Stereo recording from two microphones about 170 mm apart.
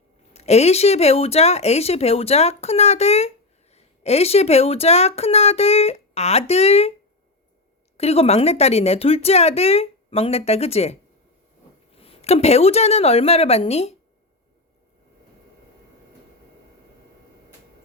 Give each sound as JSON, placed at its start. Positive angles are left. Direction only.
{"t": 0.3, "sound": "speech", "side_deg": 40}
{"t": 7.9, "sound": "speech", "side_deg": 35}
{"t": 12.0, "sound": "speech", "side_deg": 35}